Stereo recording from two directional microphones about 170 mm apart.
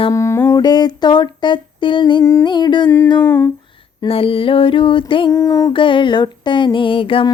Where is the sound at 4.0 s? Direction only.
35° left (ahead or behind).